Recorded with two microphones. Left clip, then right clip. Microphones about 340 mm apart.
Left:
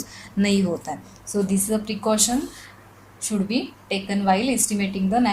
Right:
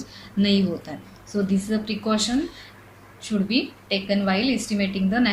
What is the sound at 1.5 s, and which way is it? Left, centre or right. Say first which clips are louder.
A woman's voice: left 1 dB; centre.